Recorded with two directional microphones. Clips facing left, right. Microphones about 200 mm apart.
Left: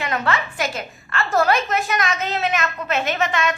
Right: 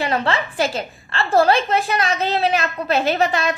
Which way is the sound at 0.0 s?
30° right (ahead or behind).